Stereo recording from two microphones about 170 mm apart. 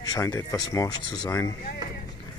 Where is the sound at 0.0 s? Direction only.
20° left (ahead or behind).